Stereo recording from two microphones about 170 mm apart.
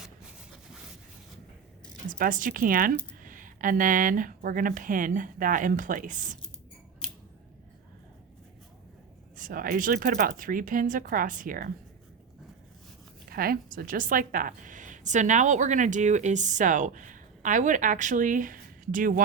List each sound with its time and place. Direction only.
2.0 s a woman's voice: 50° right (ahead or behind)
9.3 s a woman's voice: 55° right (ahead or behind)
13.2 s a woman's voice: 60° right (ahead or behind)